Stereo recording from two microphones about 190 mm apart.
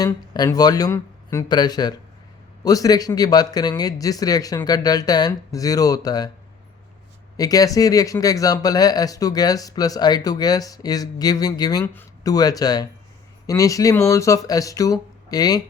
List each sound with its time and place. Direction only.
0.0 s speech: 20° left (ahead or behind)
7.3 s speech: 20° left (ahead or behind)